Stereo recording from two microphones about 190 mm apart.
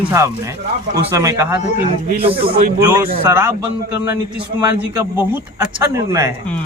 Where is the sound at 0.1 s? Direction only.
15° right (ahead or behind).